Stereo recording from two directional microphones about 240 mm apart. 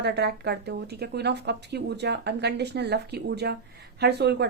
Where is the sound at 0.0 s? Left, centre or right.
Right.